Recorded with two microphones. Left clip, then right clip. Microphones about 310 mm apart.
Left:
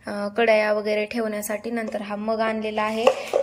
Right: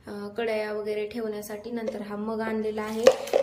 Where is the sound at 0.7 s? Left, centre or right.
Left.